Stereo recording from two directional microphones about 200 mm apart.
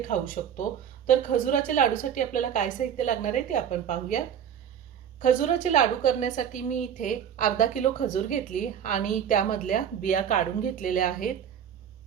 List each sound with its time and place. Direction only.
0.1 s a woman's voice: 40° left (ahead or behind)
5.2 s a woman's voice: 40° left (ahead or behind)